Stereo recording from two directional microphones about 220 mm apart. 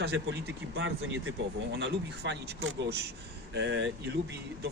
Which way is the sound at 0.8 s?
60° right (ahead or behind).